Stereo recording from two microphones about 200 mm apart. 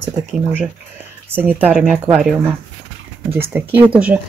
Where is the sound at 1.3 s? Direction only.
10° right (ahead or behind).